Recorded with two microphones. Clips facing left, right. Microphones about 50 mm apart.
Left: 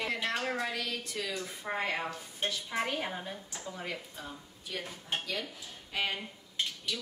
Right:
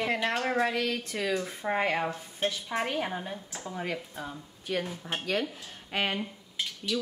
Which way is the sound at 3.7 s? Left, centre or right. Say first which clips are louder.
Right 6 dB; right.